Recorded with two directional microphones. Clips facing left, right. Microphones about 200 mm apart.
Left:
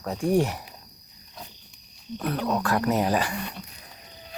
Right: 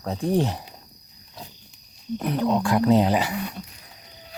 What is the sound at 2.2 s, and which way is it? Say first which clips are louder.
Speech: right 3 dB; 15° right (ahead or behind).